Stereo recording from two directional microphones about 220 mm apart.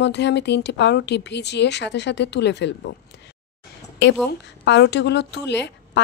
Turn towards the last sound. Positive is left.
turn(degrees=50)  # may be behind; listen again after turning